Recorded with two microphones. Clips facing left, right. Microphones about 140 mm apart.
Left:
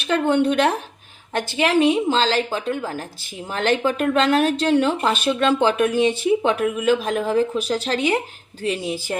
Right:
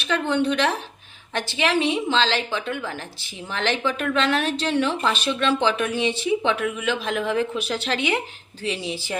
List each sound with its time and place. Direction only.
0.0 s speech: 50° left (ahead or behind)